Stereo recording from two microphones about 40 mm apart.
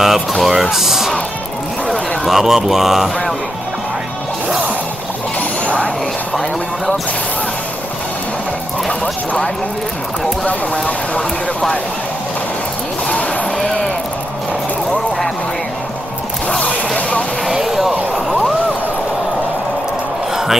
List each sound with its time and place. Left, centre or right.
0.0 s speech: centre
10.4 s speech: left
16.4 s music: left
17.5 s a sound: centre